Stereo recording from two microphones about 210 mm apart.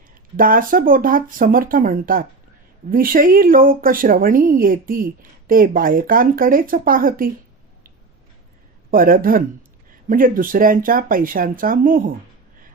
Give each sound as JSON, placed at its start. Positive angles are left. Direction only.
{"t": 0.1, "sound": "speech", "side_deg": -40}
{"t": 8.9, "sound": "speech", "side_deg": -40}